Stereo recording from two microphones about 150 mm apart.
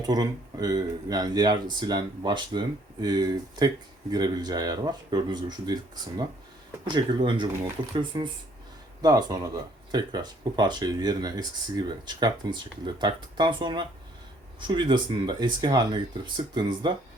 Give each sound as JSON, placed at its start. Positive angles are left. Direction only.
{"t": 0.0, "sound": "speech", "side_deg": -25}